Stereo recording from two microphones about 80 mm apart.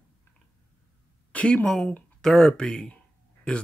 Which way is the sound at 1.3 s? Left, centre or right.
Centre.